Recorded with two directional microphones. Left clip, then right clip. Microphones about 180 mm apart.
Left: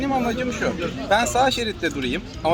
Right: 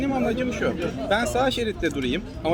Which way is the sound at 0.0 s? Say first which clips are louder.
Left 2 dB; 30° right (ahead or behind).